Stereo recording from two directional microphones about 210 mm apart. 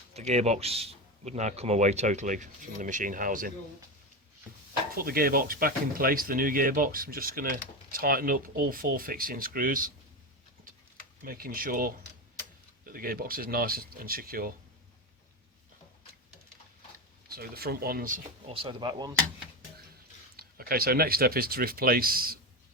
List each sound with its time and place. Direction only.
0.1 s a man's voice: 30° right (ahead or behind)
4.9 s speech: 45° right (ahead or behind)
11.2 s speech: 45° right (ahead or behind)
17.2 s speech: 45° right (ahead or behind)
18.2 s speech: 25° right (ahead or behind)
20.3 s speech: 45° right (ahead or behind)